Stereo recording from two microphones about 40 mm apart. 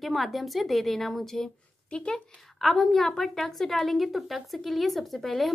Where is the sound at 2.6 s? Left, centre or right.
Centre.